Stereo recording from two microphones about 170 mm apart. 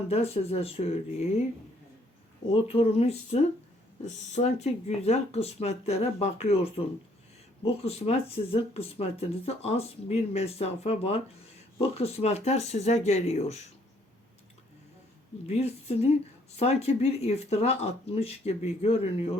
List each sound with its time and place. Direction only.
0.1 s speech: 35° left (ahead or behind)
2.5 s speech: 35° left (ahead or behind)
15.4 s speech: 40° left (ahead or behind)